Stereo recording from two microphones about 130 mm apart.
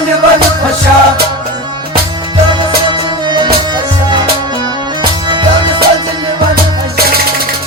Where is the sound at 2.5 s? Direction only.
35° right (ahead or behind).